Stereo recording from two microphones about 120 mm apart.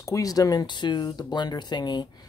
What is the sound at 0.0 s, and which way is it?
Speech, 30° left (ahead or behind).